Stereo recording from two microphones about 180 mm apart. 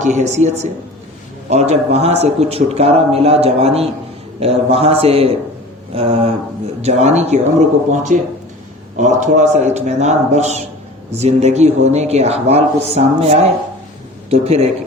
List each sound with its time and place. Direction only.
0.0 s a man's voice: 40° right (ahead or behind)